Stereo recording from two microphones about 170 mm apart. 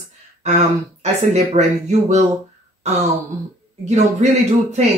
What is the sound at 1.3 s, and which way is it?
Speech, 40° right (ahead or behind).